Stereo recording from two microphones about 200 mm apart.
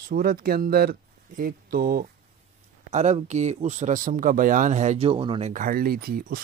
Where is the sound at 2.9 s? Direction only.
35° right (ahead or behind).